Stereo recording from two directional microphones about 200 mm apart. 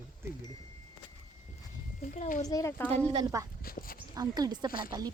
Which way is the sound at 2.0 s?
40° left (ahead or behind).